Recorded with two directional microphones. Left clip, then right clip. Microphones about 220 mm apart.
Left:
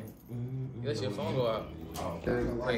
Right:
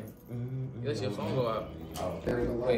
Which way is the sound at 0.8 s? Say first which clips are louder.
Even; centre (ahead or behind).